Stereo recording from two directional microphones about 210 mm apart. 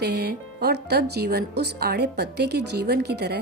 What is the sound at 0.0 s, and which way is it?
A woman's voice, 50° right (ahead or behind).